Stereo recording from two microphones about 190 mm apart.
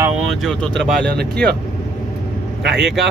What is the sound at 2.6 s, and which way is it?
Speech, 65° right (ahead or behind).